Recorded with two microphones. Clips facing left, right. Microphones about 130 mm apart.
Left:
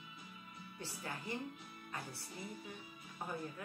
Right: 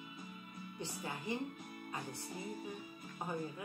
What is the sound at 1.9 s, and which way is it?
Music, 15° right (ahead or behind).